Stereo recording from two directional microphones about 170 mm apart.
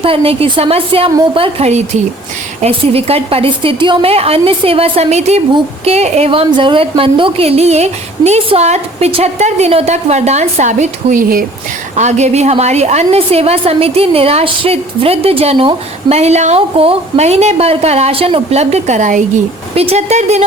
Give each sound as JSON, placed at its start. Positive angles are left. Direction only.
{"t": 0.0, "sound": "a woman's voice", "side_deg": -35}
{"t": 11.9, "sound": "a woman's voice", "side_deg": -40}
{"t": 19.7, "sound": "a woman's voice", "side_deg": -35}